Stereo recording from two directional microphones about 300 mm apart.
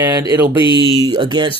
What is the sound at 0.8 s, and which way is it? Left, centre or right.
Speech, centre.